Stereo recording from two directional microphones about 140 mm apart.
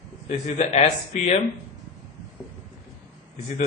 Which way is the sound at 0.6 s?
50° left (ahead or behind).